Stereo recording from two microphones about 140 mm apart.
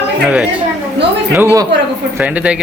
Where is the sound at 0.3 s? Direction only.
10° right (ahead or behind).